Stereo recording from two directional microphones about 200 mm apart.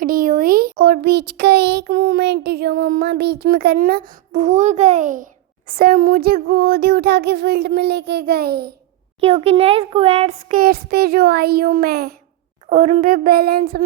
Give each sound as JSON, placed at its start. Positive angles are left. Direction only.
{"t": 0.0, "sound": "a child's voice", "side_deg": -45}
{"t": 9.2, "sound": "a child's voice", "side_deg": -30}
{"t": 12.6, "sound": "a woman's voice", "side_deg": -35}
{"t": 13.1, "sound": "a child's voice", "side_deg": -50}